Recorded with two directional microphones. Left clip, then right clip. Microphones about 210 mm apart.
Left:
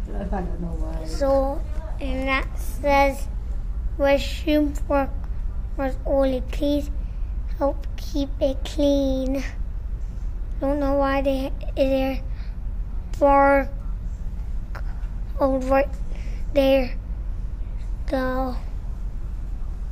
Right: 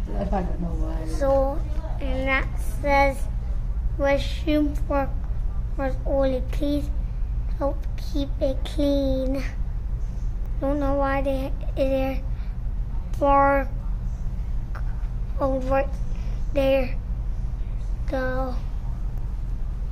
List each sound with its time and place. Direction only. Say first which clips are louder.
1.0 s a woman's voice: left 1 dB; 10° left (ahead or behind)
10.6 s a woman's voice: left 2 dB; 10° left (ahead or behind)
13.2 s a woman's voice: left 2 dB; 15° left (ahead or behind)
15.3 s a woman's voice: left 3 dB; 15° left (ahead or behind)
18.1 s a woman's voice: left 2 dB; 15° left (ahead or behind)